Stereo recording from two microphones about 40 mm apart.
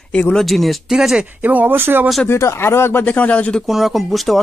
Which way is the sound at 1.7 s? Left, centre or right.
Right.